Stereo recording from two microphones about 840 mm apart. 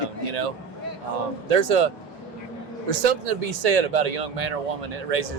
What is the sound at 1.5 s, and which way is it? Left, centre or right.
Speech, right.